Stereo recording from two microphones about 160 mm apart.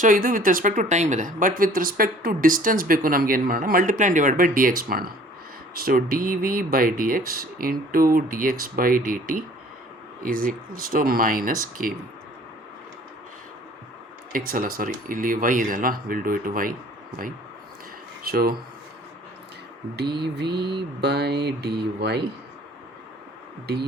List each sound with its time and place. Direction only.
0.0 s a woman's voice: 60° right (ahead or behind)
14.3 s a woman's voice: 60° right (ahead or behind)
18.2 s speech: 70° right (ahead or behind)
20.2 s mantra: 90° right